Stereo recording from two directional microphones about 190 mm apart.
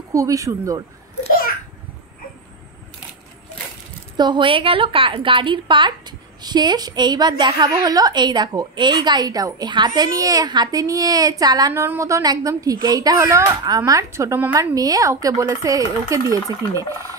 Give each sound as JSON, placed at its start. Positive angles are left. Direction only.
{"t": 0.1, "sound": "speech", "side_deg": -15}
{"t": 4.2, "sound": "a woman's voice", "side_deg": -25}